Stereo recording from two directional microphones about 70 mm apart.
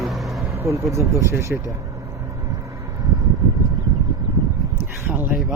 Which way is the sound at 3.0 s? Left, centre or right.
Right.